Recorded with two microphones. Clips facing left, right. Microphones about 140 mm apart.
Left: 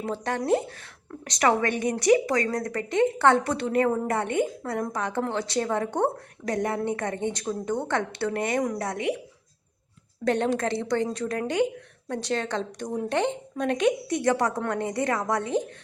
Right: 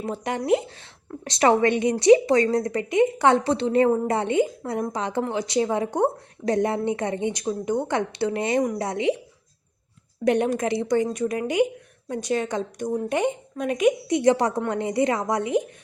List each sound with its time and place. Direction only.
0.0 s a woman's voice: 15° right (ahead or behind)
10.2 s a woman's voice: 15° right (ahead or behind)
14.1 s a woman's voice: 20° right (ahead or behind)